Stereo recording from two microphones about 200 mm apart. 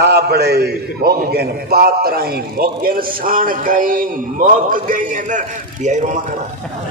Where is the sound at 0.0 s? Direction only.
55° right (ahead or behind); by 6.2 s 35° right (ahead or behind).